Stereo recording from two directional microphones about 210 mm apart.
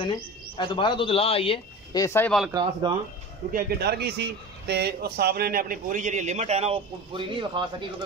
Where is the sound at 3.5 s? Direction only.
50° right (ahead or behind); by 7.8 s 20° right (ahead or behind).